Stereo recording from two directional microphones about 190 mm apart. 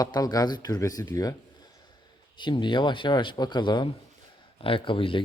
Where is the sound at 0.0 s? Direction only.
20° left (ahead or behind).